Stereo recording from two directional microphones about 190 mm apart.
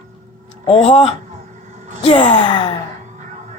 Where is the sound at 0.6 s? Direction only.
30° left (ahead or behind).